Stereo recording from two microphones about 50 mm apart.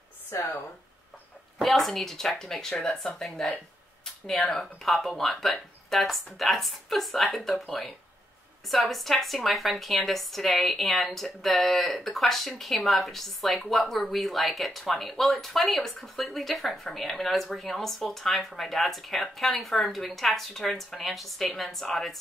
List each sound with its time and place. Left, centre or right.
0.3 s speech: left
1.6 s a woman's voice: centre